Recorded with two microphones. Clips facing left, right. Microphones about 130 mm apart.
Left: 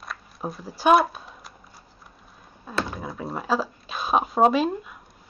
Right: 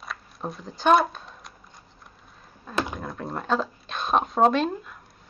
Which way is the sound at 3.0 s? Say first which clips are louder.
Left 1 dB; 5° left (ahead or behind).